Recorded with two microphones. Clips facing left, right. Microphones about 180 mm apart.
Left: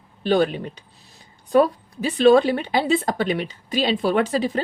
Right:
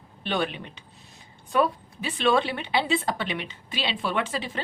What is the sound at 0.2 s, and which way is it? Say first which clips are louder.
Speech: left 9 dB; 35° left (ahead or behind).